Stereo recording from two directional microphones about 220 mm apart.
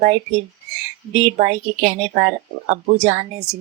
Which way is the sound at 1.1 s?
35° right (ahead or behind).